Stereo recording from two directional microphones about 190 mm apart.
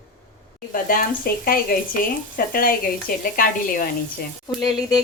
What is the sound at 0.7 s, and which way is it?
Speech, 50° left (ahead or behind).